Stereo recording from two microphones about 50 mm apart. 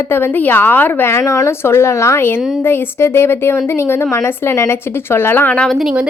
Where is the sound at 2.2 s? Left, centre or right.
Left.